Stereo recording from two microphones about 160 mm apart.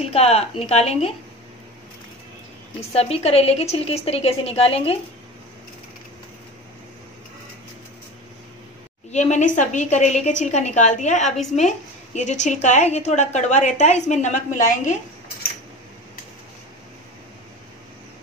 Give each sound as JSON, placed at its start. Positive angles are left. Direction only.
{"t": 0.0, "sound": "a woman's voice", "side_deg": 40}
{"t": 2.9, "sound": "a woman's voice", "side_deg": 40}
{"t": 9.1, "sound": "a woman's voice", "side_deg": 45}